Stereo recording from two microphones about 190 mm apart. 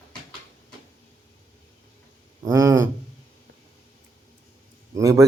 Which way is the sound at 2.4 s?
15° right (ahead or behind).